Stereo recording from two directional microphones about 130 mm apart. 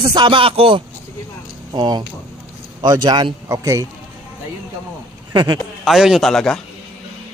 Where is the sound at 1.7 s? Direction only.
35° right (ahead or behind).